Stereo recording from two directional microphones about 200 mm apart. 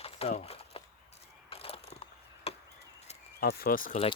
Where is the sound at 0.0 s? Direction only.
30° left (ahead or behind).